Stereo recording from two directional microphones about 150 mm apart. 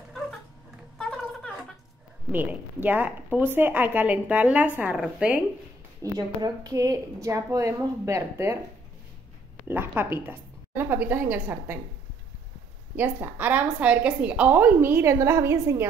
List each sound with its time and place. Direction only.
0.9 s a sound: 5° left (ahead or behind)
2.3 s a woman's voice: 10° right (ahead or behind)
6.1 s a woman's voice: 25° right (ahead or behind)
9.7 s a woman's voice: 15° right (ahead or behind)
12.9 s a woman's voice: 15° right (ahead or behind)